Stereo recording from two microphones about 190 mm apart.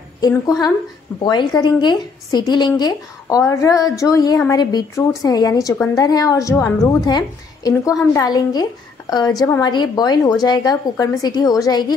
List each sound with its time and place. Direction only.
0.2 s a woman's voice: 20° left (ahead or behind)